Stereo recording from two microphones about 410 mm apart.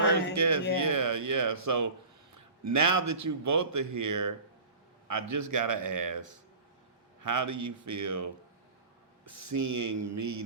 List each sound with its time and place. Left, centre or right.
0.3 s a man's voice: right
9.5 s speech: right